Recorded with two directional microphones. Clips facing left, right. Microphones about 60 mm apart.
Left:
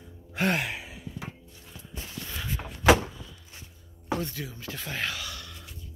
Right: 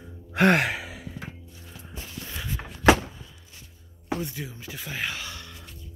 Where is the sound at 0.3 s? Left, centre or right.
Right.